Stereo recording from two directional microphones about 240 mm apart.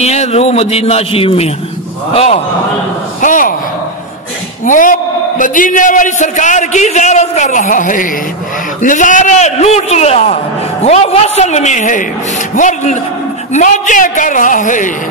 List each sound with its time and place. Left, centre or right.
0.0 s a man's voice: left
4.6 s a man's voice: left